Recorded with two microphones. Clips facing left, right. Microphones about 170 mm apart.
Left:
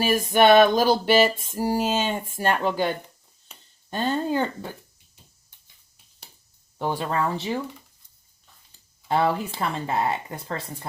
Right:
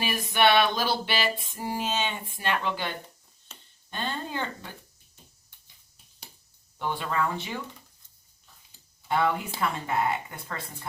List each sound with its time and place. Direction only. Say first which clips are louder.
0.0 s a sound: left 6 dB; 45° left (ahead or behind)
3.8 s speech: left 9 dB; 40° left (ahead or behind)
6.7 s speech: left 4 dB; 35° left (ahead or behind)
9.0 s speech: left 3 dB; 35° left (ahead or behind)